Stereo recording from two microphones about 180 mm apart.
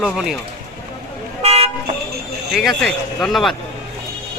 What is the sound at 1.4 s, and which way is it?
Toot, 35° right (ahead or behind).